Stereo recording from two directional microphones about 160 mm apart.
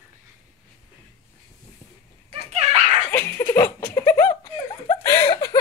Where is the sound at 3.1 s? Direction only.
15° left (ahead or behind).